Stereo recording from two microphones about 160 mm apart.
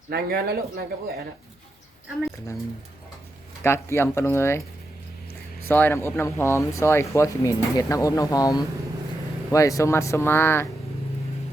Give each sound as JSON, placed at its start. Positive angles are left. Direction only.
{"t": 0.1, "sound": "speech", "side_deg": -75}
{"t": 3.6, "sound": "speech", "side_deg": 15}
{"t": 5.6, "sound": "speech", "side_deg": 15}